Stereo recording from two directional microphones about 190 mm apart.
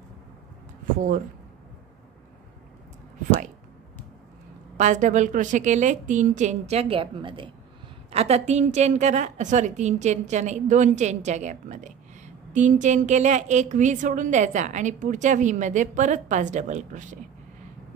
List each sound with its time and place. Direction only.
4.7 s a woman's voice: 40° right (ahead or behind)